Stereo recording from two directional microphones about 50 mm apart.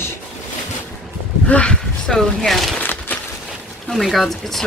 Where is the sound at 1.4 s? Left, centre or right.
Left.